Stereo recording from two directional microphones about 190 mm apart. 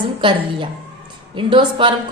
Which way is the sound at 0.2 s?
25° right (ahead or behind).